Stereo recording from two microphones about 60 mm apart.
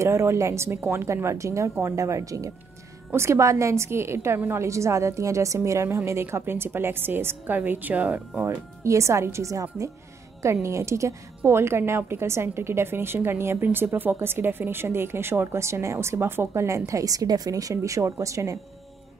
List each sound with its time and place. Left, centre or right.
0.0 s a woman's voice: right
0.7 s speech: right
1.0 s a woman's voice: right
3.1 s a woman's voice: right
4.6 s a woman's voice: right
8.5 s a woman's voice: right
16.6 s a woman's voice: right